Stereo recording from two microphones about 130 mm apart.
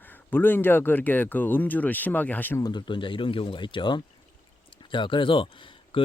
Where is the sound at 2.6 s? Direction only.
35° left (ahead or behind).